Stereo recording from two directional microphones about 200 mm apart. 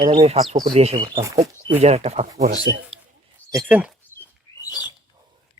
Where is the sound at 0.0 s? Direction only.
30° right (ahead or behind).